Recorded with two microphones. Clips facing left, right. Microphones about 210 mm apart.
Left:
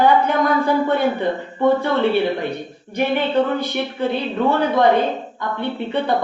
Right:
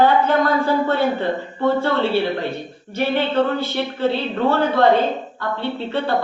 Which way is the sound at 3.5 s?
15° left (ahead or behind).